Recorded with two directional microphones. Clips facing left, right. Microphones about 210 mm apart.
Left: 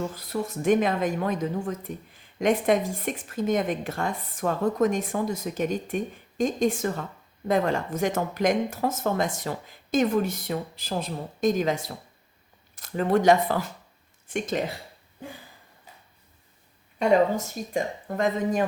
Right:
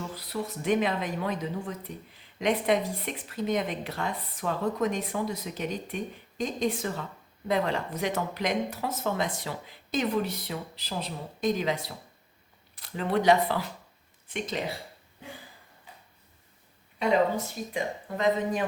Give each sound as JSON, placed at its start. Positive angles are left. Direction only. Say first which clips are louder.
{"t": 0.0, "sound": "speech", "louder": "left 4 dB", "side_deg": 45}
{"t": 17.0, "sound": "speech", "louder": "left 4 dB", "side_deg": 45}